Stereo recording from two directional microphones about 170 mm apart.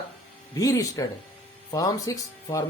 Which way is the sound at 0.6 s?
20° left (ahead or behind).